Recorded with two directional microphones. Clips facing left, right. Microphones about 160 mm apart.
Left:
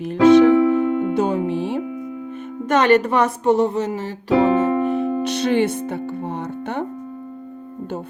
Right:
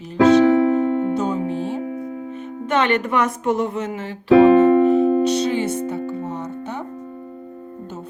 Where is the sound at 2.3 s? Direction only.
50° left (ahead or behind).